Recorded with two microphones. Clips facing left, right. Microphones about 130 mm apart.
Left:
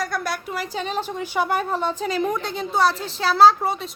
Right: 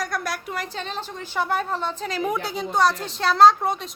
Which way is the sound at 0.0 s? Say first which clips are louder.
Left 2 dB; centre (ahead or behind).